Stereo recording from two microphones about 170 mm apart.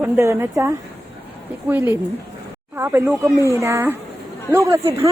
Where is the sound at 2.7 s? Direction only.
15° right (ahead or behind).